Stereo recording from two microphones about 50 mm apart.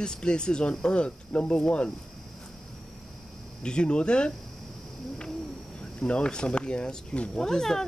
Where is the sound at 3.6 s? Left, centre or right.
Centre.